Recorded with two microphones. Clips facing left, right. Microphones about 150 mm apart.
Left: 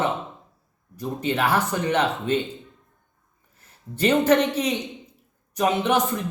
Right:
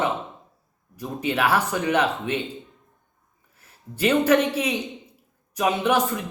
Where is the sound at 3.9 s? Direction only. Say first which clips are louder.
Even; 5° right (ahead or behind).